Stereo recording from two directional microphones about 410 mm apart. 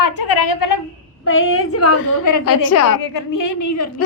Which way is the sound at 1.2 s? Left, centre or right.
Left.